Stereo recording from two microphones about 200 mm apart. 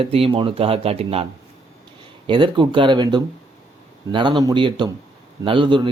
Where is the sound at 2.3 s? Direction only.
25° right (ahead or behind).